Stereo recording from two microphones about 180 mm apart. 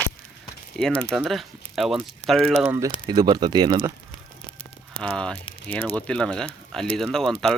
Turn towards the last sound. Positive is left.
turn(degrees=5)  # may be behind; listen again after turning